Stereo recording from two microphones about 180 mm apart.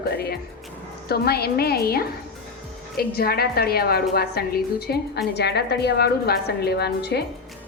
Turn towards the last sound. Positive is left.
turn(degrees=65)  # may be behind; listen again after turning